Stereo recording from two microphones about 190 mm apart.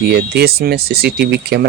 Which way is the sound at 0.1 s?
55° right (ahead or behind).